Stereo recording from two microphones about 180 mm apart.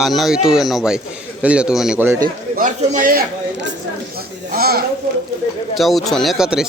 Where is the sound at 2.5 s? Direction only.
50° right (ahead or behind).